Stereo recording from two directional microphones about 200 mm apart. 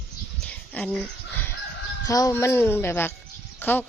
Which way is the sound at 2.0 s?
15° left (ahead or behind).